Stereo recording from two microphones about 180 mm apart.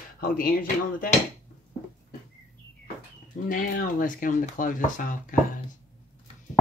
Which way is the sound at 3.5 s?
50° left (ahead or behind).